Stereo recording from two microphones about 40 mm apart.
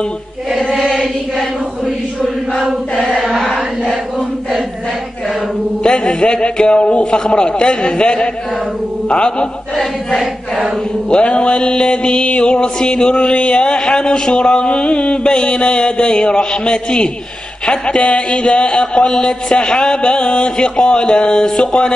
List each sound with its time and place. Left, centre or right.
3.2 s chant: centre
5.9 s mantra: left
11.1 s mantra: left